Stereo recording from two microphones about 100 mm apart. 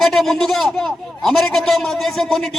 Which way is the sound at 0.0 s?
Centre (ahead or behind).